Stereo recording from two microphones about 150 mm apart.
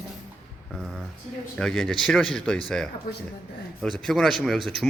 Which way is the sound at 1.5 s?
5° left (ahead or behind).